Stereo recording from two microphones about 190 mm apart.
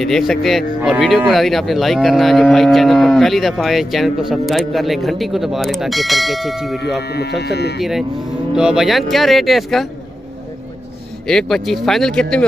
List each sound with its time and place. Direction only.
0.0 s speech: centre (ahead or behind)
7.0 s speech: 60° left (ahead or behind)
8.5 s speech: 5° right (ahead or behind)
11.2 s speech: centre (ahead or behind)